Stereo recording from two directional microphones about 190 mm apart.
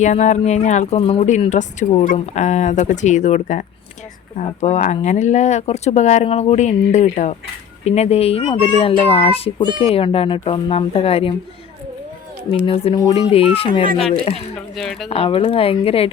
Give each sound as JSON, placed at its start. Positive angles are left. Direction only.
{"t": 0.0, "sound": "speech", "side_deg": 40}
{"t": 12.5, "sound": "speech", "side_deg": 30}
{"t": 14.8, "sound": "speech", "side_deg": 0}
{"t": 15.1, "sound": "speech", "side_deg": 30}